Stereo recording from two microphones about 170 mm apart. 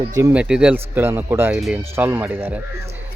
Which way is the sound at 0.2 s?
10° right (ahead or behind).